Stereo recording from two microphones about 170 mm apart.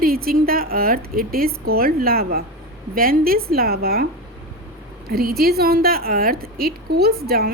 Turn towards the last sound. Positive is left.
turn(degrees=-65)  # may be behind; listen again after turning